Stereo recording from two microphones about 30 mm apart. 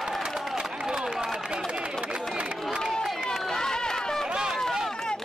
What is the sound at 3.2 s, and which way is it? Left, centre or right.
Run, centre.